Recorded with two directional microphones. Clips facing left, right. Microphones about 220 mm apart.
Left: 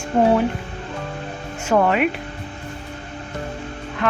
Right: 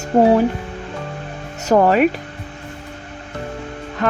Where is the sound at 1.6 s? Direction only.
40° right (ahead or behind).